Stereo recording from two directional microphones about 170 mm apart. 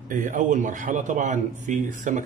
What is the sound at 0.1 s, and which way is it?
Speech, 50° right (ahead or behind).